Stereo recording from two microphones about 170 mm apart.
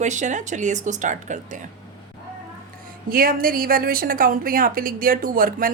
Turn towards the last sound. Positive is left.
turn(degrees=-55)  # may be behind; listen again after turning